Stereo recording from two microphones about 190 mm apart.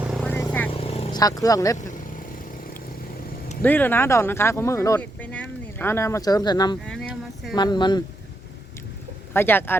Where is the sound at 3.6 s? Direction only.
10° left (ahead or behind).